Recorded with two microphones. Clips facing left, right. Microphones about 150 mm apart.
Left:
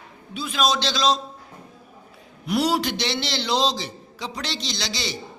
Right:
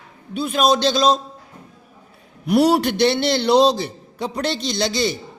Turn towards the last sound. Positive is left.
turn(degrees=-50)  # may be behind; listen again after turning